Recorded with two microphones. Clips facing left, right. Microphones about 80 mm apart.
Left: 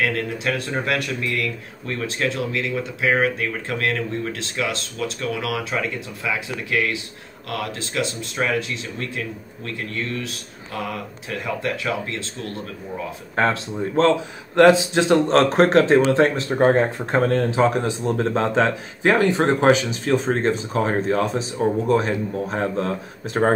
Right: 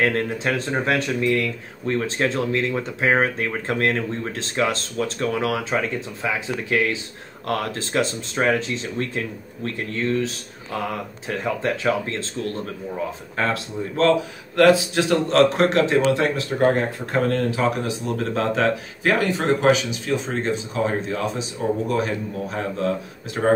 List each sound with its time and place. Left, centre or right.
0.0 s speech: right
13.4 s a man's voice: left